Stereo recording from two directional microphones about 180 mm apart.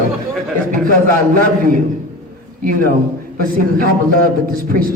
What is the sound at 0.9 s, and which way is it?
A man's voice, 50° right (ahead or behind).